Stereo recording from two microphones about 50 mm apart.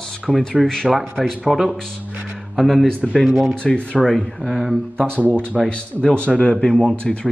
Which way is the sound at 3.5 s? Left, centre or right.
Left.